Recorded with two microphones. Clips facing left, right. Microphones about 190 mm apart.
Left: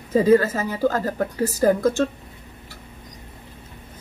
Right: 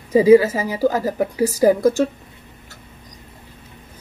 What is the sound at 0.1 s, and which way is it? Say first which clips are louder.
A woman's voice: right 5 dB; 10° right (ahead or behind).